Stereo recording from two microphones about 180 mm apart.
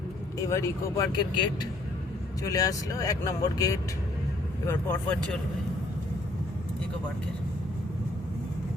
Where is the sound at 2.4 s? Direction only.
20° left (ahead or behind).